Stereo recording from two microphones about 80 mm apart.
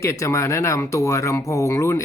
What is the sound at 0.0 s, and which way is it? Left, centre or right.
Speech, left.